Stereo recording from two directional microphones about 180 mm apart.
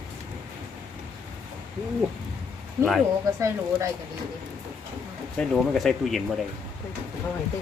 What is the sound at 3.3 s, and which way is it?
Speech, 15° right (ahead or behind).